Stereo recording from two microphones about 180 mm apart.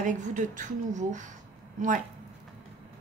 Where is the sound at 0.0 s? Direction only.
45° right (ahead or behind).